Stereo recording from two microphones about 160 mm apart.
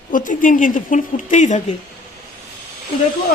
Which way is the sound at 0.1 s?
55° left (ahead or behind).